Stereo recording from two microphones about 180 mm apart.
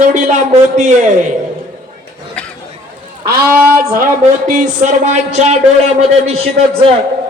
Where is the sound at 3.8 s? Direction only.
55° right (ahead or behind); by 6.5 s 35° right (ahead or behind).